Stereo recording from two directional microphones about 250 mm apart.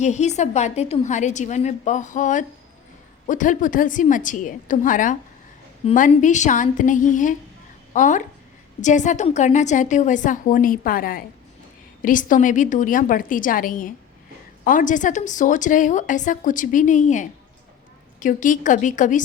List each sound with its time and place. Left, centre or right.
0.0 s a woman's voice: left